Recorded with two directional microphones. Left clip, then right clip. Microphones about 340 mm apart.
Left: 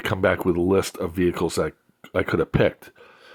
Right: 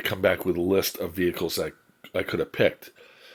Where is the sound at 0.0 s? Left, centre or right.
Left.